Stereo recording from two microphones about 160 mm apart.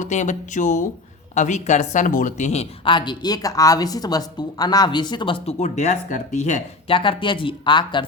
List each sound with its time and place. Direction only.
0.0 s speech: 50° left (ahead or behind)
2.8 s a woman's voice: 30° left (ahead or behind)
5.5 s speech: 45° left (ahead or behind)
6.8 s speech: 35° left (ahead or behind)